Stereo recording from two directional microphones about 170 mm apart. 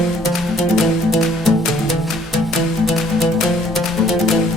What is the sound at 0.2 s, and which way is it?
Music, centre (ahead or behind).